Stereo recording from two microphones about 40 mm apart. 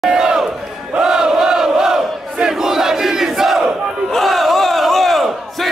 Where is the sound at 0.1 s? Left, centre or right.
Centre.